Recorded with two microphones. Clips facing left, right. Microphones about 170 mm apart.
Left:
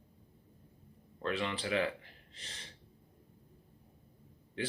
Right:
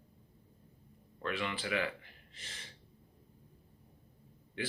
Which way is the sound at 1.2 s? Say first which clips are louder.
Left 2 dB; 30° left (ahead or behind).